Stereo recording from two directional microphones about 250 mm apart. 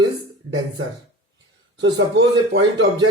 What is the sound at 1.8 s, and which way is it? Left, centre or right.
A man's voice, right.